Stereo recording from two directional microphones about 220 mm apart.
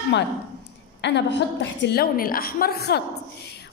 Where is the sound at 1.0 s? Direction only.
50° left (ahead or behind).